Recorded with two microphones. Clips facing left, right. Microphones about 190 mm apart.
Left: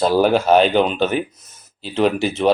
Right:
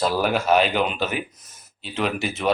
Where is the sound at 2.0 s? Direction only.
30° left (ahead or behind).